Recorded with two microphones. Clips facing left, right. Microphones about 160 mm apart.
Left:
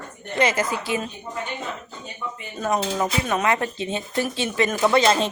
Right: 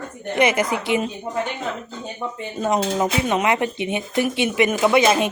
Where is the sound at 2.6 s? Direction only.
20° right (ahead or behind).